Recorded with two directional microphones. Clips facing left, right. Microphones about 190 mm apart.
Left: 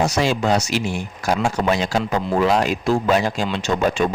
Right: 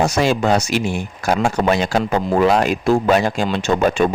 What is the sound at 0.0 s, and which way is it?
Speech, 55° right (ahead or behind).